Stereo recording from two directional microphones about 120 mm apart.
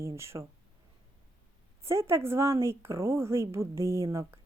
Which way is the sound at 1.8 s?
20° right (ahead or behind).